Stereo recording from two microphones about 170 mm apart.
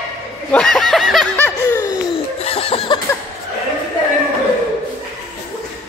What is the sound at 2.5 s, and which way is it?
Snicker, 35° left (ahead or behind).